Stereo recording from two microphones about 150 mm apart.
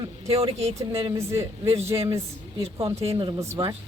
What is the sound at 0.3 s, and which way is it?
Speech, 40° right (ahead or behind).